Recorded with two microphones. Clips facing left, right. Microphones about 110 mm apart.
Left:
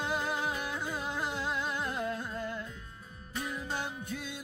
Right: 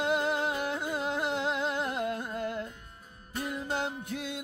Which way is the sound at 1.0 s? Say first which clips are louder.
Right 7 dB; 65° right (ahead or behind).